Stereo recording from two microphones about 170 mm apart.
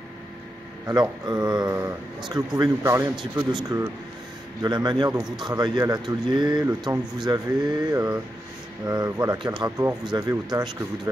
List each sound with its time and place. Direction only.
0.8 s a man's voice: 25° right (ahead or behind)